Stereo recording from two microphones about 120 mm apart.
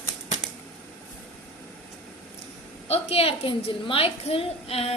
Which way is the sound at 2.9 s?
55° left (ahead or behind).